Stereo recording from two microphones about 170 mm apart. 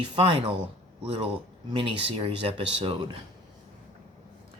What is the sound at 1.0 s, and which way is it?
Speech, 35° right (ahead or behind).